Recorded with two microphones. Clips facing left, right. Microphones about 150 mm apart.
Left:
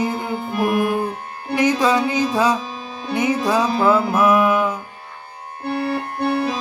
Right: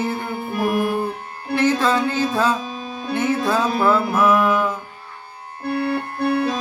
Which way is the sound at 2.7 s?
50° right (ahead or behind).